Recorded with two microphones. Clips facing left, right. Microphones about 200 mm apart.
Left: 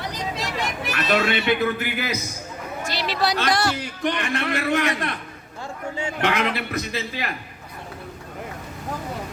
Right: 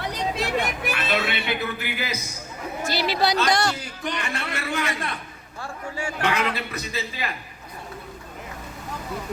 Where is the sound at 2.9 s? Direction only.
5° right (ahead or behind).